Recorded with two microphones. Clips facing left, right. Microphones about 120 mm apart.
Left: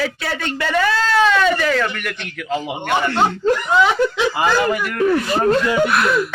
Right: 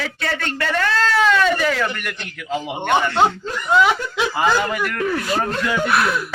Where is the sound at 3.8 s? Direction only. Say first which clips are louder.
Left 2 dB; 15° right (ahead or behind).